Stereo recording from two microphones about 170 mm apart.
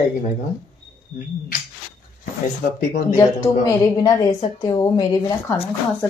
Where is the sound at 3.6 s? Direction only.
20° left (ahead or behind).